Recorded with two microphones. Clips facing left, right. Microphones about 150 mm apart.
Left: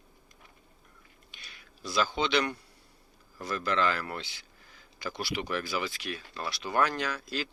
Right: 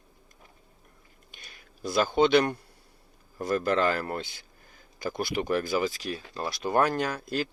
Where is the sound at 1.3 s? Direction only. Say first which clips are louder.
Right 2 dB; 50° right (ahead or behind).